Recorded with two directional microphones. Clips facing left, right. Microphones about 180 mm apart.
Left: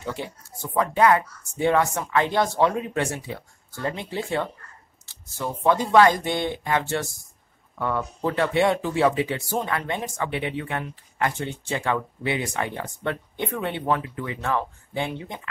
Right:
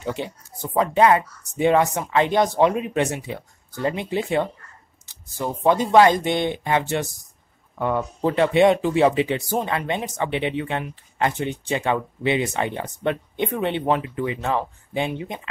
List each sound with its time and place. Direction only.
0.0 s speech: 20° right (ahead or behind)